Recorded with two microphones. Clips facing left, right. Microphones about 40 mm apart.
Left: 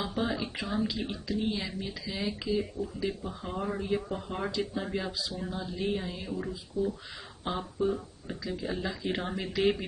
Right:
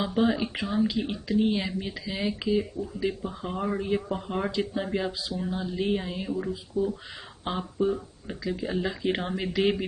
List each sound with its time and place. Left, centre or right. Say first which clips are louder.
0.0 s speech: right 6 dB; right
3.8 s speech: right 3 dB; right
4.8 s speech: right 4 dB; centre
5.5 s speech: right 5 dB; right
8.8 s speech: right 4 dB; right